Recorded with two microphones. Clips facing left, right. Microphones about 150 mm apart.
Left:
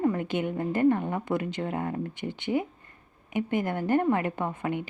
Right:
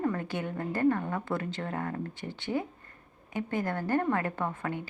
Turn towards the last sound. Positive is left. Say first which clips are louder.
# left 3 dB
turn(degrees=20)  # may be behind; listen again after turning